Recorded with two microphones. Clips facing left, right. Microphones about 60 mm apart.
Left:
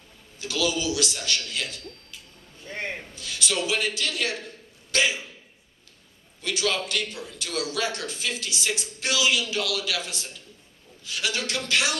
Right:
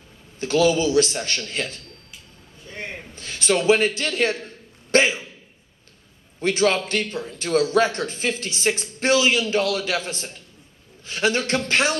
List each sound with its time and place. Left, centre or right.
0.4 s a man's voice: right
3.2 s a man's voice: right
4.9 s a sound: right
6.4 s a man's voice: right